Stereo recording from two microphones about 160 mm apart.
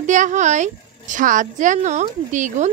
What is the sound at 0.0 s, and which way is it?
A woman's voice, 50° right (ahead or behind).